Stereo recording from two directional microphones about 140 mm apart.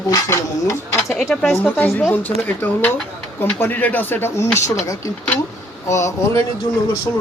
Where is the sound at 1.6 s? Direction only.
10° left (ahead or behind).